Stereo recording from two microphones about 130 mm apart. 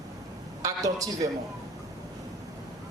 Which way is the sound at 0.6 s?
25° right (ahead or behind).